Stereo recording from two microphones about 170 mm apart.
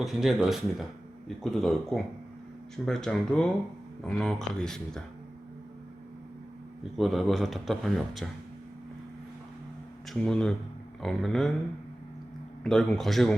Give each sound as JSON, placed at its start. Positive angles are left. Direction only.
{"t": 0.0, "sound": "a man's voice", "side_deg": 0}
{"t": 6.9, "sound": "a man's voice", "side_deg": 0}
{"t": 10.1, "sound": "a man's voice", "side_deg": 5}
{"t": 12.6, "sound": "a man's voice", "side_deg": 0}